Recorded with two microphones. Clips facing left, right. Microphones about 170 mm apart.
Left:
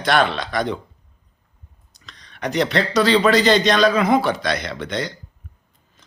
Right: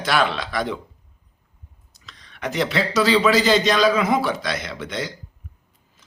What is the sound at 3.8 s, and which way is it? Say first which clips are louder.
Speech: left 2 dB; 60° left (ahead or behind).